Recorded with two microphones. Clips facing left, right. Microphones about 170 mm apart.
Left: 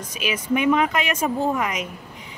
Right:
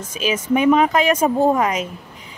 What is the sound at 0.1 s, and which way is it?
A man's voice, 30° right (ahead or behind).